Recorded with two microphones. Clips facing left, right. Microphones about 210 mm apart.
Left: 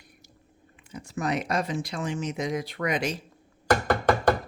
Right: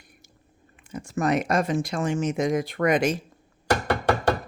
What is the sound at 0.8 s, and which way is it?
Speech, 50° right (ahead or behind).